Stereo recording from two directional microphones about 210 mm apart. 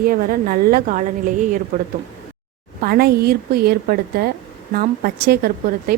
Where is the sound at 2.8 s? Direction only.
45° right (ahead or behind).